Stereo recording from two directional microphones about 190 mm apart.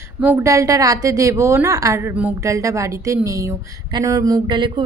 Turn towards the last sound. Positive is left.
turn(degrees=-25)  # may be behind; listen again after turning